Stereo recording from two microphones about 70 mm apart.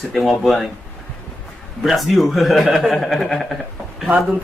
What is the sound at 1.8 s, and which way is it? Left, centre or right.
Speech, centre.